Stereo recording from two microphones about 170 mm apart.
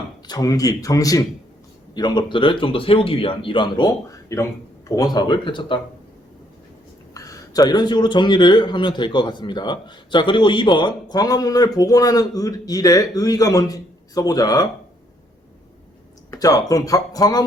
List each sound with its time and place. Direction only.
0.3 s a man's voice: 20° left (ahead or behind)
7.1 s a man's voice: 20° left (ahead or behind)
16.3 s a man's voice: 20° left (ahead or behind)